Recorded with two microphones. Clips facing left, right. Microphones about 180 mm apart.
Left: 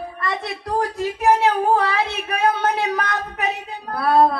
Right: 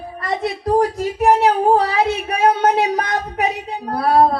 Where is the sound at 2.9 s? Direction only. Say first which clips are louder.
Right 4 dB; 40° right (ahead or behind).